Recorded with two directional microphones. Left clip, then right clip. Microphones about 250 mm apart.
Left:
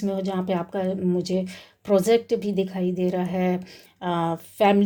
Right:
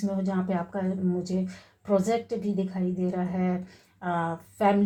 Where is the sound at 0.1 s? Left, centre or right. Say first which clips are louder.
Left 6 dB; left.